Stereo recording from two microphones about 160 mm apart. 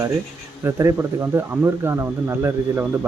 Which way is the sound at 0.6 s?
20° right (ahead or behind).